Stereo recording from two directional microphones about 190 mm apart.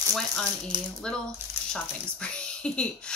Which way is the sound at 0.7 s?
25° right (ahead or behind).